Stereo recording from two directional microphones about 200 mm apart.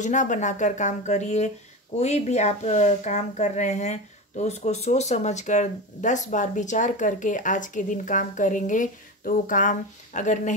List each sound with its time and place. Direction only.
0.0 s speech: 40° left (ahead or behind)